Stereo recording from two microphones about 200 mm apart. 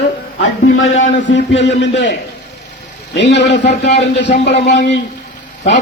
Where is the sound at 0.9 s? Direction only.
65° left (ahead or behind).